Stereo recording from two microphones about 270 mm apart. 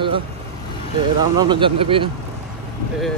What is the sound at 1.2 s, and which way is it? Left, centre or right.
Speech, centre.